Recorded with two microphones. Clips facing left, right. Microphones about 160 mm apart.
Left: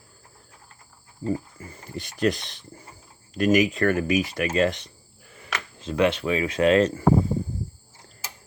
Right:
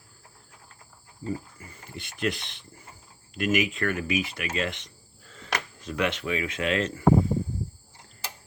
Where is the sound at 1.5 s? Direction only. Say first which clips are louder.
Left 6 dB; 40° left (ahead or behind).